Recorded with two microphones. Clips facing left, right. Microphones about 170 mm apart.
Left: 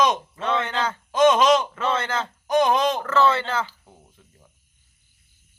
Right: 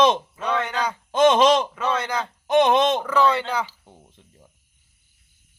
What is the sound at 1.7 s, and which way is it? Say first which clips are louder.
Speech: even; 15° right (ahead or behind).